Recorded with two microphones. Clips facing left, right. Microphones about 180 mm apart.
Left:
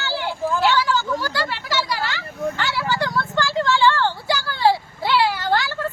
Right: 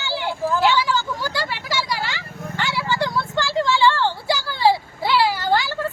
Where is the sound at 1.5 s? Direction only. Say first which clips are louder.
Left 1 dB; 10° right (ahead or behind).